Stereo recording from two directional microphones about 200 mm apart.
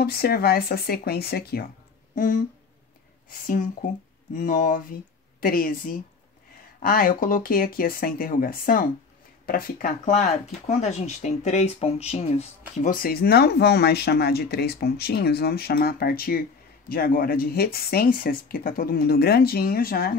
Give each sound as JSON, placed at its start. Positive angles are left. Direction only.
{"t": 0.0, "sound": "speech", "side_deg": 50}
{"t": 2.1, "sound": "speech", "side_deg": 40}